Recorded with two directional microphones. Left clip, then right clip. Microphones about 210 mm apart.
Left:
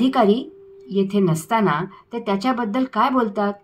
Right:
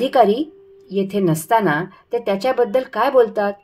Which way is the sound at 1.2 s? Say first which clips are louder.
Right 6 dB; 50° right (ahead or behind).